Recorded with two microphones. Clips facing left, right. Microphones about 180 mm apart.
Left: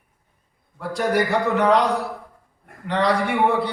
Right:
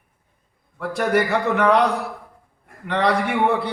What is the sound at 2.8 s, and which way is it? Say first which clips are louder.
Speech: right 1 dB; 60° right (ahead or behind).